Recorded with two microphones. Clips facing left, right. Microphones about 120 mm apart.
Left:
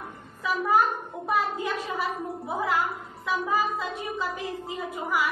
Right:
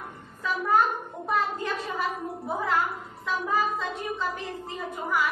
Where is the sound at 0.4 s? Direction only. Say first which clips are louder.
Left 1 dB; 5° left (ahead or behind).